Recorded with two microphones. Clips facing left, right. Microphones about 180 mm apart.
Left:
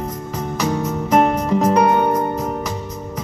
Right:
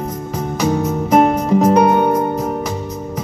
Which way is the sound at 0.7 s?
20° right (ahead or behind).